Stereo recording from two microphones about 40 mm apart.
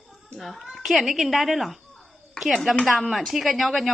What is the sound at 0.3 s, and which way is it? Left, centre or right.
A woman's voice, centre.